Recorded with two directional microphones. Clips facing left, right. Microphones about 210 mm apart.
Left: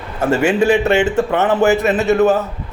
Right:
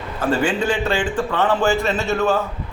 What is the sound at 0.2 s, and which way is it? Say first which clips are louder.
A man's voice: left 5 dB; 25° left (ahead or behind).